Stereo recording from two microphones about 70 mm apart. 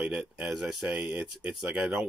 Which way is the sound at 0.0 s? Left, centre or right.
Centre.